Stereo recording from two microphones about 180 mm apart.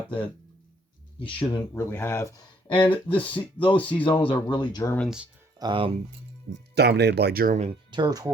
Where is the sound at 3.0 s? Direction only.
30° left (ahead or behind).